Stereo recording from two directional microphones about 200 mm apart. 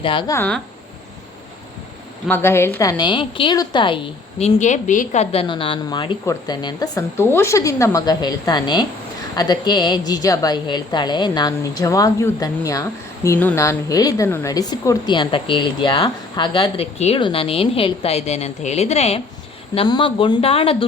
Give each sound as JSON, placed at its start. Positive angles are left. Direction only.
{"t": 0.0, "sound": "a woman's voice", "side_deg": 25}
{"t": 0.3, "sound": "speech", "side_deg": 5}
{"t": 2.2, "sound": "a woman's voice", "side_deg": 10}